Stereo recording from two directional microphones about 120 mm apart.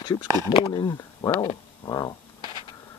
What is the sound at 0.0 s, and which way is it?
Speech, 40° left (ahead or behind).